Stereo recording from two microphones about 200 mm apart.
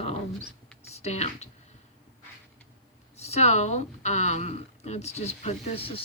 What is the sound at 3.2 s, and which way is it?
Speech, 30° left (ahead or behind).